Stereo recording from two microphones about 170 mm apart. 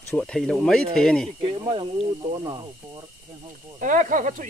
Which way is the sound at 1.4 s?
30° right (ahead or behind).